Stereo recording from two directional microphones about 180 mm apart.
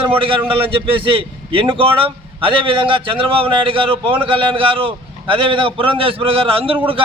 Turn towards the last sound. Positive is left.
turn(degrees=-30)  # may be behind; listen again after turning